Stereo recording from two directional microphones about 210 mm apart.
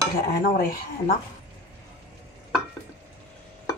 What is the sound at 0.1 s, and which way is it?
Dishes, 45° left (ahead or behind).